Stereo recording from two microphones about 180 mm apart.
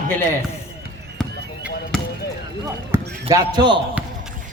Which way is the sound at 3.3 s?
25° right (ahead or behind).